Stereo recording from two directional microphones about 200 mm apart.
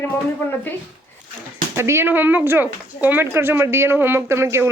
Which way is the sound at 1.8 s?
10° right (ahead or behind).